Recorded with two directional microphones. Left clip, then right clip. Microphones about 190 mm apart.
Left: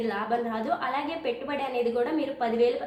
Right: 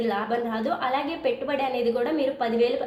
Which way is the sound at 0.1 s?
30° right (ahead or behind).